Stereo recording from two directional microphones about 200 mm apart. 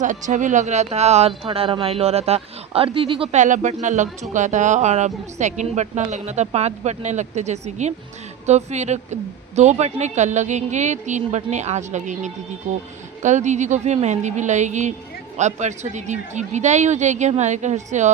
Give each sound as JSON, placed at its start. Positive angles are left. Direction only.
{"t": 0.0, "sound": "speech", "side_deg": -40}